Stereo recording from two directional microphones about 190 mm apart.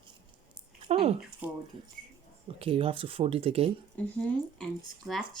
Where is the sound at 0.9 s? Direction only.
30° right (ahead or behind).